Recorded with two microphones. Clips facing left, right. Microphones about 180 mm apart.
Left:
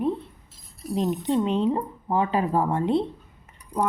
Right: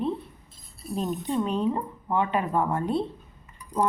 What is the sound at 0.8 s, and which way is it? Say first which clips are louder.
Speech: left 4 dB; 90° left.